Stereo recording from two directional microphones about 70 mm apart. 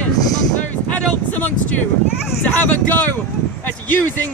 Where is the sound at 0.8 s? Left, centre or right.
Left.